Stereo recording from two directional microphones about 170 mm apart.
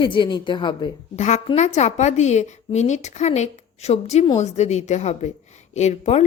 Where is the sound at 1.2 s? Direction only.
40° left (ahead or behind).